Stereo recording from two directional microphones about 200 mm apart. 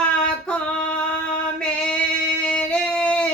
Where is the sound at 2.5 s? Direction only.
5° left (ahead or behind).